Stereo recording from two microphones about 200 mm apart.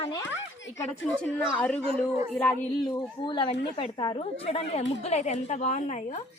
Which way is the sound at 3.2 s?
25° left (ahead or behind).